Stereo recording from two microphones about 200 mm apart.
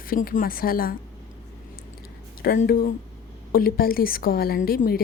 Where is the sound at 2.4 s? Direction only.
45° left (ahead or behind).